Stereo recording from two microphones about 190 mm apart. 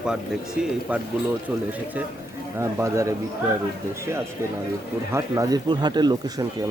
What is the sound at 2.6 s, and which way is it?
Speech, 15° right (ahead or behind).